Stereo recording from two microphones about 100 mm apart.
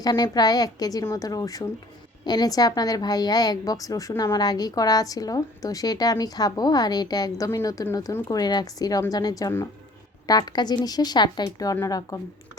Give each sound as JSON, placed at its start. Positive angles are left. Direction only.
{"t": 0.1, "sound": "a woman's voice", "side_deg": 40}